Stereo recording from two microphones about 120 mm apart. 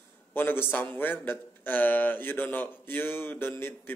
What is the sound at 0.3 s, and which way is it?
A man's voice, 15° left (ahead or behind).